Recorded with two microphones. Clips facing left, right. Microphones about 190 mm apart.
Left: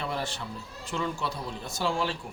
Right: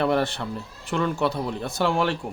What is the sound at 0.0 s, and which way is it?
Speech, 65° right (ahead or behind).